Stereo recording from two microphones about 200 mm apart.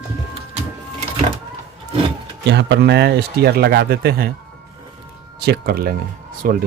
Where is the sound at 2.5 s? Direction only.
60° right (ahead or behind).